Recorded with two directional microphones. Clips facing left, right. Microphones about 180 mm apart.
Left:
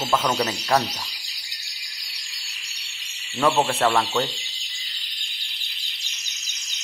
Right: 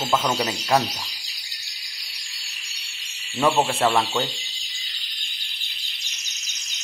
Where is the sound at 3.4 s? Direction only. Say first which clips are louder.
Even; 15° right (ahead or behind).